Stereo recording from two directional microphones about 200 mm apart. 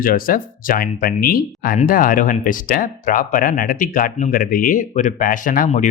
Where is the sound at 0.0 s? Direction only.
45° left (ahead or behind).